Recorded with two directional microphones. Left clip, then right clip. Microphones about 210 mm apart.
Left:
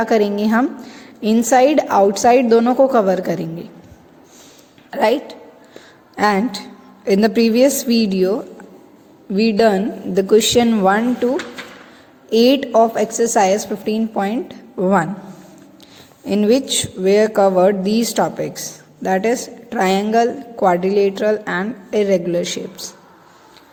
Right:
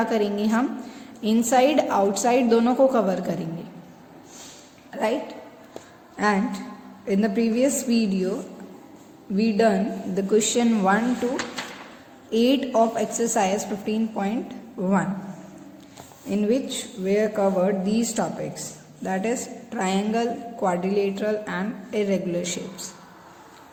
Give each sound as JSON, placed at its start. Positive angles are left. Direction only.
{"t": 0.0, "sound": "a woman's voice", "side_deg": 35}
{"t": 4.9, "sound": "speech", "side_deg": 45}
{"t": 12.3, "sound": "a woman's voice", "side_deg": 40}
{"t": 16.2, "sound": "a woman's voice", "side_deg": 50}